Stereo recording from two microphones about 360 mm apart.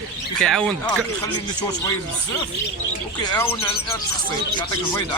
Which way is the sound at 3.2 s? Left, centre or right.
Centre.